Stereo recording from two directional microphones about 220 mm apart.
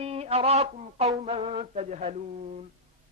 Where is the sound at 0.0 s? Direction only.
30° right (ahead or behind).